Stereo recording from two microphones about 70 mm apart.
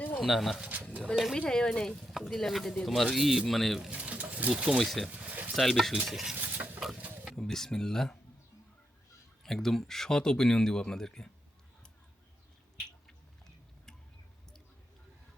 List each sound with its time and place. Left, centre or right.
0.2 s speech: centre
1.4 s speech: centre
2.0 s speech: centre
3.8 s speech: centre
4.8 s speech: centre
5.0 s a sound: right
5.5 s speech: centre
6.3 s a sound: right
6.7 s a sound: centre
7.3 s speech: centre
9.4 s speech: centre